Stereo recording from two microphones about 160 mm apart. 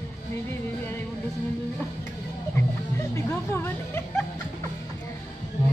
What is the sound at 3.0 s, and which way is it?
Speech, 15° left (ahead or behind).